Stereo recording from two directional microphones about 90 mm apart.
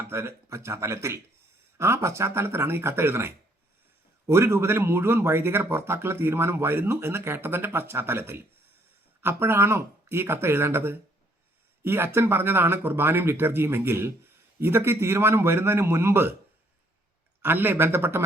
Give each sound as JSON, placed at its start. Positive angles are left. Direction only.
{"t": 0.0, "sound": "speech", "side_deg": -25}
{"t": 17.4, "sound": "speech", "side_deg": -20}